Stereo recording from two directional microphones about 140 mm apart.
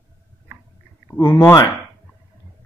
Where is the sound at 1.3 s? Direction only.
20° left (ahead or behind).